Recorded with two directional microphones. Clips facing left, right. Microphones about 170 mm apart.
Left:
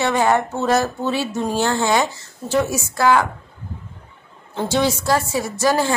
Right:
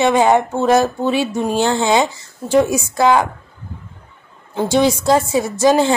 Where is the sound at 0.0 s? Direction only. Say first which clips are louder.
Right 5 dB; 20° right (ahead or behind).